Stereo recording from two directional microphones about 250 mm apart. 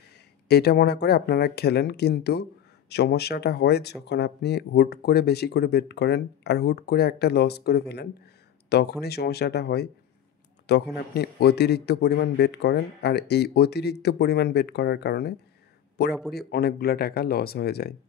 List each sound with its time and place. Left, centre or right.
0.5 s speech: left
11.0 s speech: left